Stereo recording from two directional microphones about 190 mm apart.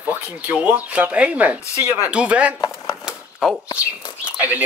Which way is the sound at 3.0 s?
5° right (ahead or behind).